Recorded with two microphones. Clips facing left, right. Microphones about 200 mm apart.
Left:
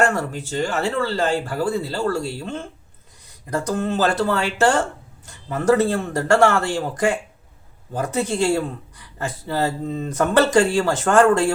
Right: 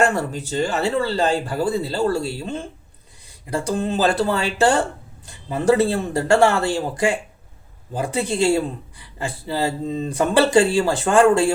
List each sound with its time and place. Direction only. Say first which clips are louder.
0.0 s speech: right 1 dB; 15° right (ahead or behind)